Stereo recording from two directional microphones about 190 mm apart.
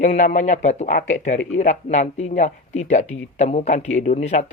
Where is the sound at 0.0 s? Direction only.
40° left (ahead or behind).